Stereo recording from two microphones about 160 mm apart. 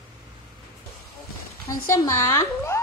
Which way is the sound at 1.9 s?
20° left (ahead or behind).